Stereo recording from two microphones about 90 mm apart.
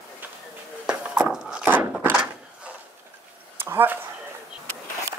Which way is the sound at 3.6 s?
25° right (ahead or behind).